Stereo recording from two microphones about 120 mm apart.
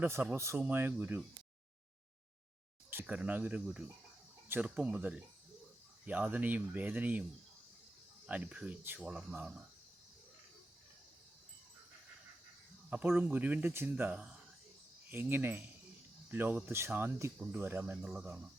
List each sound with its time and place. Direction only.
0.0 s speech: 15° right (ahead or behind)
2.9 s speech: 15° right (ahead or behind)
8.3 s speech: 10° right (ahead or behind)
12.9 s speech: 15° right (ahead or behind)